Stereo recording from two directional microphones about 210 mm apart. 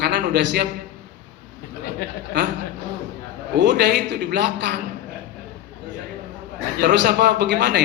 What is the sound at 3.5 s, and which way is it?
A man's voice, 55° right (ahead or behind).